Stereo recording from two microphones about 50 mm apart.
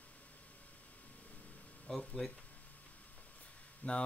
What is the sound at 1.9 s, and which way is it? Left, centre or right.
Speech, centre.